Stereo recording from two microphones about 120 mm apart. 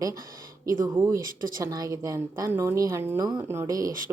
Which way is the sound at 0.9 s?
30° right (ahead or behind).